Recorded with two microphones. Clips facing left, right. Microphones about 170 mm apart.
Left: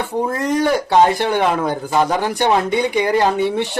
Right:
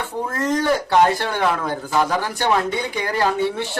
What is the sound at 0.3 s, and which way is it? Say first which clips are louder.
Speech: left 1 dB; 15° left (ahead or behind).